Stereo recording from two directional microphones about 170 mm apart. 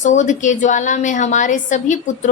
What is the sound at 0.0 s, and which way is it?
A woman's voice, 45° left (ahead or behind).